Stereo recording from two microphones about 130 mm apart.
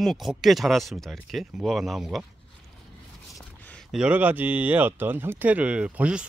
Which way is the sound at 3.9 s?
10° right (ahead or behind).